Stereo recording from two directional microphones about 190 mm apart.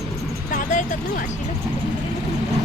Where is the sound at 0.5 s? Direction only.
45° left (ahead or behind).